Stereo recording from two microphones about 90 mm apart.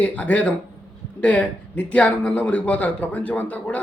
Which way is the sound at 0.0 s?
15° left (ahead or behind).